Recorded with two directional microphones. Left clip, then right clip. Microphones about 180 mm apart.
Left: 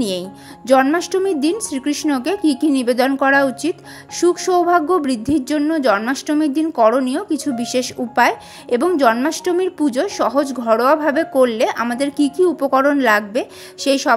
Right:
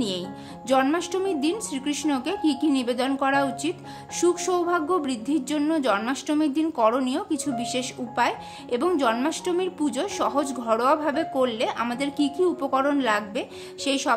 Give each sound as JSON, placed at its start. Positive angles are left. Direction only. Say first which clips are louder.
{"t": 0.7, "sound": "speech", "louder": "left 8 dB", "side_deg": 30}